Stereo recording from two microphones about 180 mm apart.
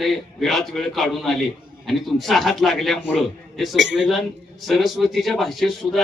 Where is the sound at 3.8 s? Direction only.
90° right.